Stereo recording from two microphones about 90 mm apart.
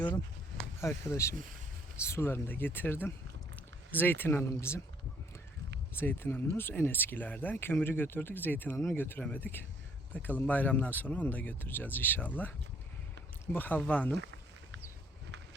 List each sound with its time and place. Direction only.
0.8 s speech: 30° left (ahead or behind)
6.0 s speech: 25° left (ahead or behind)
13.5 s speech: 20° left (ahead or behind)